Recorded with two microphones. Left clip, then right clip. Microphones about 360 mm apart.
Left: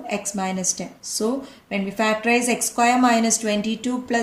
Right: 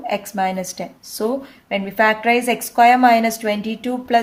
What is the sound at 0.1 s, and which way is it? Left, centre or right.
A woman's voice, right.